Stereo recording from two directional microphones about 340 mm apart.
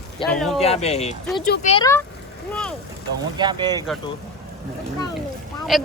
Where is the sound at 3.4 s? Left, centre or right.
Centre.